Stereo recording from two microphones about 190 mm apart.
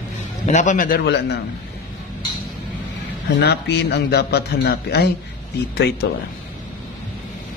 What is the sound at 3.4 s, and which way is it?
A man's voice, 65° left (ahead or behind).